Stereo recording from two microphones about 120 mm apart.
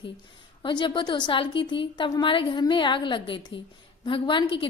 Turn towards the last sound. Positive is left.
turn(degrees=45)  # may be behind; listen again after turning